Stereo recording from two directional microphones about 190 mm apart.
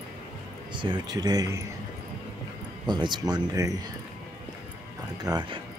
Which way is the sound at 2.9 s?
25° right (ahead or behind).